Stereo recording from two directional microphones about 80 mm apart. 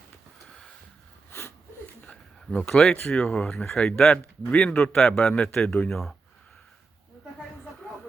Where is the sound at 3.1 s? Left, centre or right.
Centre.